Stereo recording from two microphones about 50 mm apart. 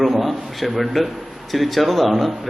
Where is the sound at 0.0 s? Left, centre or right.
Centre.